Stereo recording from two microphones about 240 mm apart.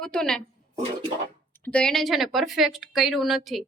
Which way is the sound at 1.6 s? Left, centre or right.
Centre.